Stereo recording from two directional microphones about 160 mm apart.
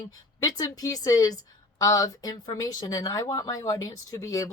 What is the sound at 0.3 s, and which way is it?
Speech, 25° left (ahead or behind).